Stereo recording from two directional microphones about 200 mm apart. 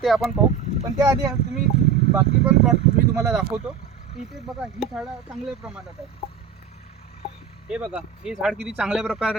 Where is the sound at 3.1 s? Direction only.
10° right (ahead or behind).